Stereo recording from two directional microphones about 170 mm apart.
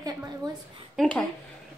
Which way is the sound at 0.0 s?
20° right (ahead or behind).